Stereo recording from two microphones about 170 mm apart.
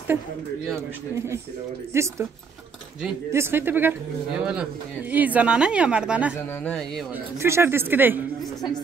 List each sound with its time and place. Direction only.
1.1 s speech: 15° right (ahead or behind)
3.3 s speech: 15° right (ahead or behind)
6.6 s speech: 5° left (ahead or behind)
7.3 s speech: 15° right (ahead or behind)